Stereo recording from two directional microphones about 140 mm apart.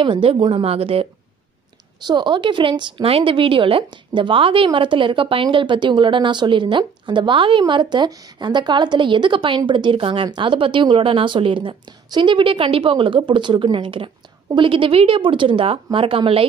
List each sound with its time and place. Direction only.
0.0 s a woman's voice: 40° right (ahead or behind)
2.0 s a woman's voice: 30° right (ahead or behind)